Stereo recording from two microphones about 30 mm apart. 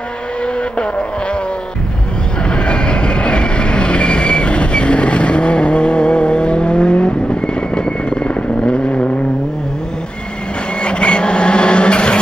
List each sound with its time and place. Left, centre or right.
2.4 s train: left
10.8 s vehicle: left